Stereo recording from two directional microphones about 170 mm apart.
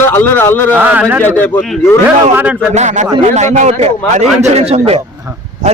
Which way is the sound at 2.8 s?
45° right (ahead or behind).